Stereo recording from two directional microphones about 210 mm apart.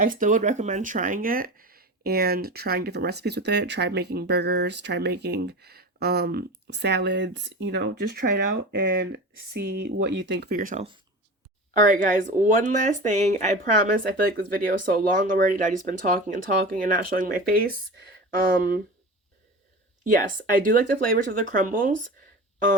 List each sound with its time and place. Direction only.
0.0 s speech: 40° right (ahead or behind)
20.1 s speech: 40° right (ahead or behind)